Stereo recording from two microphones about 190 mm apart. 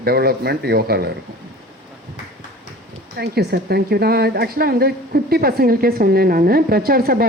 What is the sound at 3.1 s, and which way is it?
A woman's voice, 60° right (ahead or behind).